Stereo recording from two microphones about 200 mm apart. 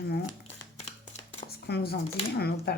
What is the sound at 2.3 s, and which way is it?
Speech, 50° left (ahead or behind).